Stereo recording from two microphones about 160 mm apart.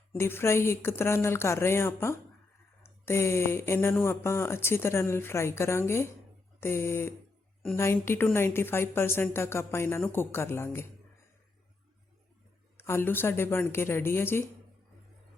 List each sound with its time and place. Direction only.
0.2 s speech: 15° left (ahead or behind)
12.7 s speech: 15° left (ahead or behind)